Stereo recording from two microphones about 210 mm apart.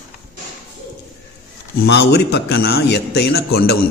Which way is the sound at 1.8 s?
55° left (ahead or behind).